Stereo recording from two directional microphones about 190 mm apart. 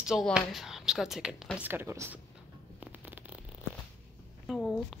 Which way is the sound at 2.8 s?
10° right (ahead or behind).